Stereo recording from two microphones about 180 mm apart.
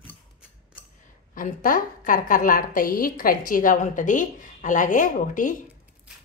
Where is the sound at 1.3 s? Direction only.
50° left (ahead or behind).